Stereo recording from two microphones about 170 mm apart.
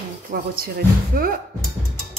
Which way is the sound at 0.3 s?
60° right (ahead or behind).